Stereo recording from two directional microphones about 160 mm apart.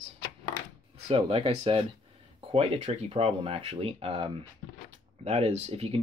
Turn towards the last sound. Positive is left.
turn(degrees=-40)  # may be behind; listen again after turning